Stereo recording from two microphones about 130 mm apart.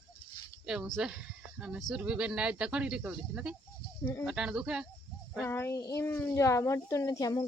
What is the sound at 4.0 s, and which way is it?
Speech, 20° left (ahead or behind).